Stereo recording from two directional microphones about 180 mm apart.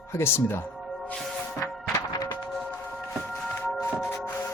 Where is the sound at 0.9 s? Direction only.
5° left (ahead or behind).